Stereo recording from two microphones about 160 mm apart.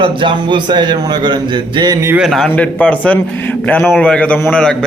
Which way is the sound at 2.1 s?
Centre (ahead or behind).